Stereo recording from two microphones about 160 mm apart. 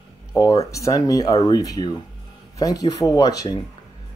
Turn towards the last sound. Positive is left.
turn(degrees=25)  # may be behind; listen again after turning